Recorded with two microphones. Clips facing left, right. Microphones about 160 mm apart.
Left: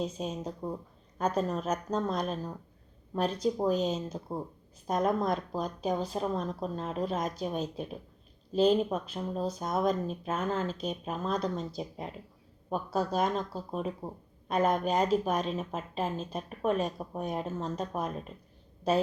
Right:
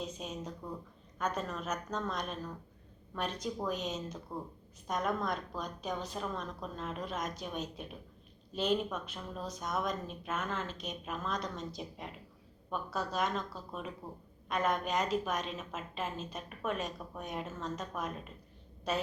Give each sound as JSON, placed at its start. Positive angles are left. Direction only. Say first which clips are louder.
{"t": 0.0, "sound": "speech", "louder": "left 7 dB", "side_deg": 30}